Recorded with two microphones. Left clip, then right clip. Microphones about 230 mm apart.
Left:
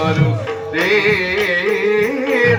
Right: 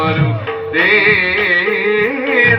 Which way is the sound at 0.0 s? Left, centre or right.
Left.